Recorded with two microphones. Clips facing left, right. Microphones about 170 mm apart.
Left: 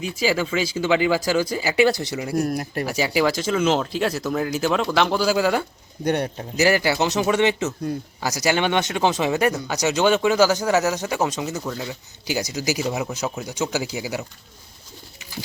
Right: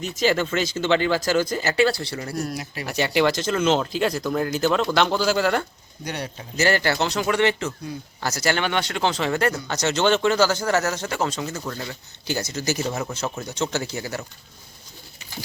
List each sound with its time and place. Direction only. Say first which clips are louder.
0.1 s speech: right 1 dB; 5° left (ahead or behind)
2.3 s speech: left 9 dB; 50° left (ahead or behind)
2.8 s speech: right 1 dB; 5° left (ahead or behind)
6.1 s speech: left 9 dB; 50° left (ahead or behind)
6.6 s speech: left 2 dB; 10° left (ahead or behind)
7.9 s speech: left 6 dB; 55° left (ahead or behind)
8.2 s speech: left 2 dB; 15° left (ahead or behind)
11.4 s speech: left 3 dB; 5° left (ahead or behind)